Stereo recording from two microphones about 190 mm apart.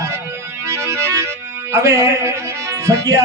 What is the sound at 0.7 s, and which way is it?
Music, 15° right (ahead or behind).